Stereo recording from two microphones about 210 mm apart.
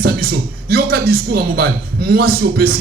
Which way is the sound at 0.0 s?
45° right (ahead or behind).